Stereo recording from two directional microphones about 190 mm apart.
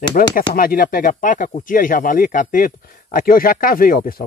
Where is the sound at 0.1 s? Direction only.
50° left (ahead or behind).